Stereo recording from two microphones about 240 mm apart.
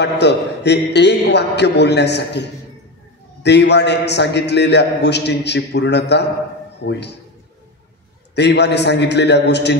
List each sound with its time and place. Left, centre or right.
0.0 s a man's voice: left
3.4 s a man's voice: left
8.4 s a man's voice: left